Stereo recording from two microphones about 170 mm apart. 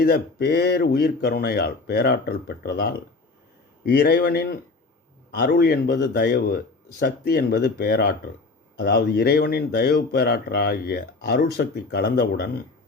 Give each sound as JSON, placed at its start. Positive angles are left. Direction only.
{"t": 0.0, "sound": "speech", "side_deg": 65}